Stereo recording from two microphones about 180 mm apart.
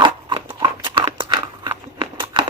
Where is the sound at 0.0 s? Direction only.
25° right (ahead or behind).